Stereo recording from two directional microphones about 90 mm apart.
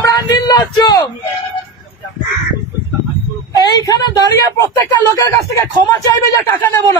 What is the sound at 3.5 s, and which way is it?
Speech, 50° left (ahead or behind).